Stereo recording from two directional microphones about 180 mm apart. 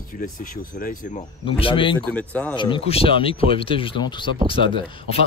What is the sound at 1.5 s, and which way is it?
Speech, 30° left (ahead or behind).